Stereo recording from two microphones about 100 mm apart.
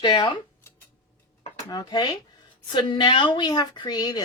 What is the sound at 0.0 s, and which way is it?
Speech, 45° left (ahead or behind).